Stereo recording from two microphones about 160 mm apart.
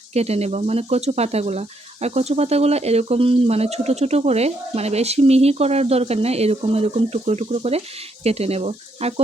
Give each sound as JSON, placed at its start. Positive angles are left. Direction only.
{"t": 0.1, "sound": "speech", "side_deg": -40}